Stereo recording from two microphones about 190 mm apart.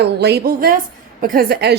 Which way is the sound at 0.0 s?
60° right (ahead or behind).